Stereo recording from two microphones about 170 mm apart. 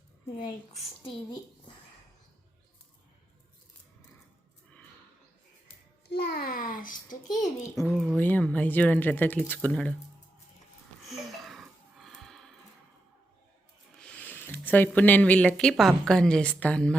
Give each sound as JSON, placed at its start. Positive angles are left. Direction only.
{"t": 0.3, "sound": "speech", "side_deg": 50}
{"t": 6.1, "sound": "a child's voice", "side_deg": 70}
{"t": 7.9, "sound": "speech", "side_deg": 0}
{"t": 11.1, "sound": "music", "side_deg": 0}
{"t": 14.0, "sound": "speech", "side_deg": 5}